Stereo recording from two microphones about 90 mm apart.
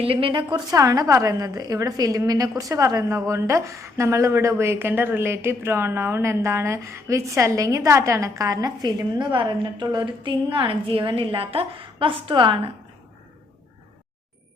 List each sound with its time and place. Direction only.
0.0 s a woman's voice: 85° right
0.5 s a woman's voice: 40° right (ahead or behind); by 12.5 s 70° right (ahead or behind)